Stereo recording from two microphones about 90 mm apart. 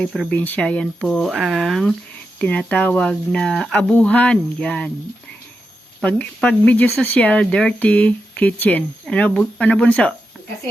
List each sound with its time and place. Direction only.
0.3 s speech: 20° left (ahead or behind)
2.4 s speech: 15° left (ahead or behind)
6.0 s speech: 15° left (ahead or behind)